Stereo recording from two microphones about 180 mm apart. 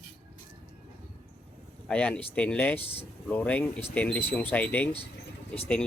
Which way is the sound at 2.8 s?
35° left (ahead or behind).